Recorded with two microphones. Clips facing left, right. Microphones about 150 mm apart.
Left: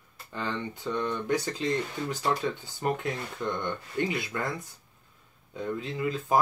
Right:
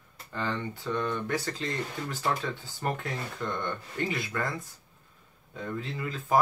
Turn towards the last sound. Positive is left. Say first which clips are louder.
# left 1 dB
turn(degrees=20)  # may be behind; listen again after turning